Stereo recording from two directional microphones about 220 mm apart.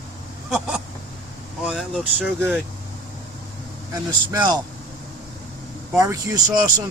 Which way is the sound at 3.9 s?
20° right (ahead or behind).